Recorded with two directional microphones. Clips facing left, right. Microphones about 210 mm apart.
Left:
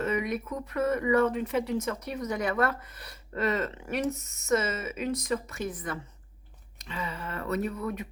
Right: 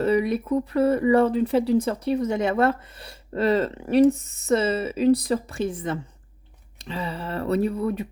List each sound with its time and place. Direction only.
0.0 s speech: 35° right (ahead or behind)